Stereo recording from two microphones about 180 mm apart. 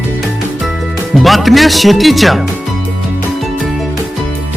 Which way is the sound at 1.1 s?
Centre (ahead or behind).